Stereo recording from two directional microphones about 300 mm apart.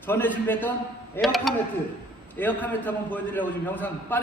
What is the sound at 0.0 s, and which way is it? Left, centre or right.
A man's voice, centre.